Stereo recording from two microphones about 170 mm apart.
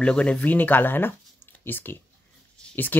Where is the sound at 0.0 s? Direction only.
5° left (ahead or behind).